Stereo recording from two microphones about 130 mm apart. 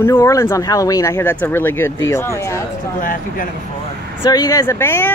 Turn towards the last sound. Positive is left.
turn(degrees=20)  # may be behind; listen again after turning